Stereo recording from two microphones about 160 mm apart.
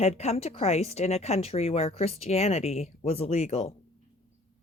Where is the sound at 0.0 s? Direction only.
40° left (ahead or behind).